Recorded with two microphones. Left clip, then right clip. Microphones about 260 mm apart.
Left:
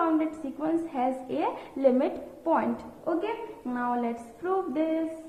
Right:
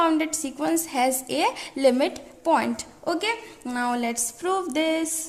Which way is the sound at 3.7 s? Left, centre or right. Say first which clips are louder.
Right 4 dB; right.